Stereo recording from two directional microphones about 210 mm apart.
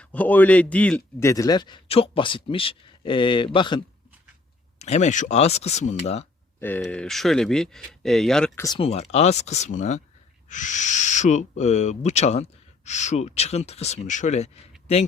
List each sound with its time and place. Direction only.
0.0 s a man's voice: 5° left (ahead or behind); by 3.8 s 25° left (ahead or behind)
4.8 s speech: 30° left (ahead or behind)
6.6 s speech: 10° left (ahead or behind)
8.6 s speech: 25° left (ahead or behind)